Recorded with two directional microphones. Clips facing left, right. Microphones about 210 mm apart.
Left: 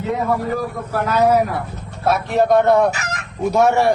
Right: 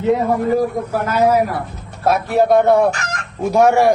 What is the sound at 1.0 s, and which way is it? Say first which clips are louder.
A man's voice: even; centre (ahead or behind).